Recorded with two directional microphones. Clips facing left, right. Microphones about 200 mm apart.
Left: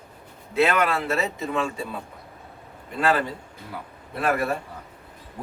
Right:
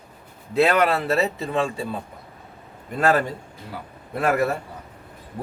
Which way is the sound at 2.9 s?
45° right (ahead or behind).